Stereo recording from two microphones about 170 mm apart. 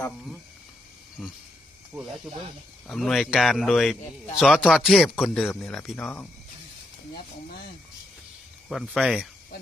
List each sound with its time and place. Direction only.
2.8 s speech: centre (ahead or behind)
6.0 s speech: 15° left (ahead or behind)
8.7 s speech: 5° left (ahead or behind)